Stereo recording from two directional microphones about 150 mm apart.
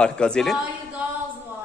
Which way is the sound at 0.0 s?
5° left (ahead or behind).